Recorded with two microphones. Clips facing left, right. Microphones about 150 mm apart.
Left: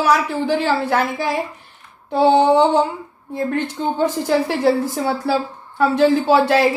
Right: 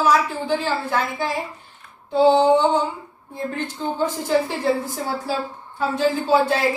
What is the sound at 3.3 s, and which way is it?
A woman's voice, 75° left (ahead or behind).